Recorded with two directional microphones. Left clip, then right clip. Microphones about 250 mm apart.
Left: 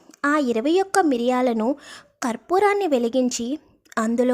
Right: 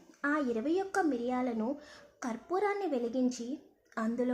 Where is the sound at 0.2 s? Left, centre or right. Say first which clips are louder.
Left 11 dB; left.